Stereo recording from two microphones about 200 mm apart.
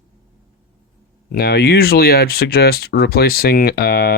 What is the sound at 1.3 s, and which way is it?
Speech, 55° left (ahead or behind).